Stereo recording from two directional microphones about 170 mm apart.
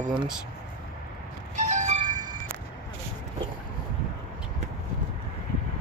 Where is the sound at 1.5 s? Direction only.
45° right (ahead or behind).